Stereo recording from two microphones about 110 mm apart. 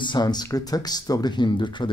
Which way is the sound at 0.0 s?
40° left (ahead or behind).